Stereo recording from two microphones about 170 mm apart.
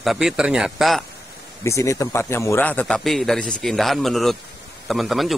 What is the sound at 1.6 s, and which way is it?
A man's voice, 20° left (ahead or behind).